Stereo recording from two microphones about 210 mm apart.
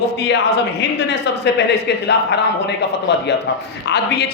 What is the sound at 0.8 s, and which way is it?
Speech, 55° left (ahead or behind).